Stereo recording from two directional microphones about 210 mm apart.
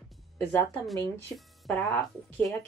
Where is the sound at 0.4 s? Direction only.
10° left (ahead or behind).